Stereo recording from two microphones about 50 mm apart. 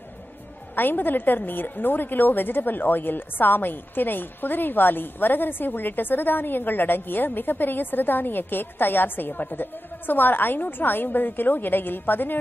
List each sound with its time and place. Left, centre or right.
0.7 s a woman's voice: left